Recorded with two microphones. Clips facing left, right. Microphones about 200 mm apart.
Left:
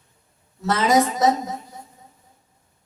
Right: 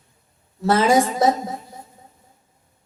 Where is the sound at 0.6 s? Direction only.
30° right (ahead or behind).